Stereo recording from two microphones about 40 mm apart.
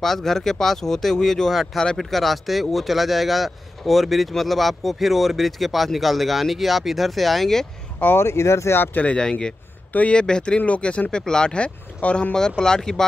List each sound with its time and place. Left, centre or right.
0.0 s speech: centre
8.2 s speech: left
9.1 s speech: left
11.5 s speech: left
12.4 s speech: centre